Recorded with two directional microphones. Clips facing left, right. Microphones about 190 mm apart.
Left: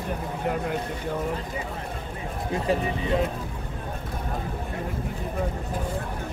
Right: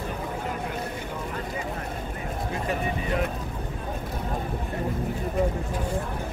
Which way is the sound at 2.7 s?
25° left (ahead or behind).